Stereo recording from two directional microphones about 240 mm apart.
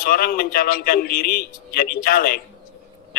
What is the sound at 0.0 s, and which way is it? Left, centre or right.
A man's voice, left.